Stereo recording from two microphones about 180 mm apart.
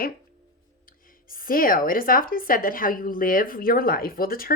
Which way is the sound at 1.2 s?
50° left (ahead or behind).